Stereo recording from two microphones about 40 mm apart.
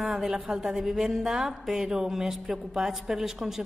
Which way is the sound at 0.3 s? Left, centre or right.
Centre.